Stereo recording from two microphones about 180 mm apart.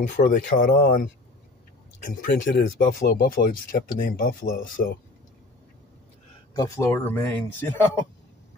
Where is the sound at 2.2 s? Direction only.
45° left (ahead or behind).